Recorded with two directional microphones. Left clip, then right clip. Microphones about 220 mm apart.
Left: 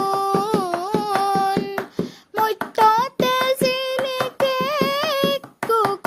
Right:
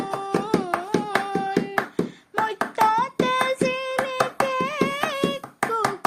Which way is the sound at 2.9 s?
50° left (ahead or behind).